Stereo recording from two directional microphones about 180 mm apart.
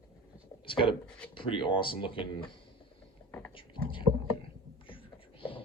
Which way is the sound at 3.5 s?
30° left (ahead or behind).